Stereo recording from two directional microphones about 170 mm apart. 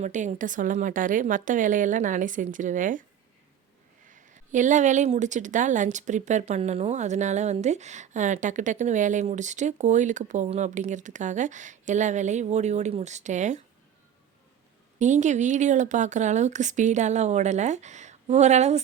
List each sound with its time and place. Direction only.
0.0 s a woman's voice: 45° right (ahead or behind)
4.1 s a woman's voice: 50° right (ahead or behind)
14.9 s a woman's voice: 45° right (ahead or behind)